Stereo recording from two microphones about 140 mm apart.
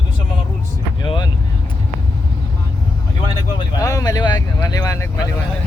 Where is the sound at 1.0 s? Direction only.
30° left (ahead or behind).